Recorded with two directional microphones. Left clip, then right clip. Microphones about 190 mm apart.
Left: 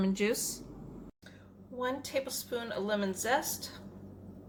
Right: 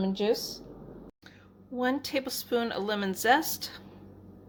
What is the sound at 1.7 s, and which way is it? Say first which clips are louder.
Speech: right 4 dB; 50° right (ahead or behind).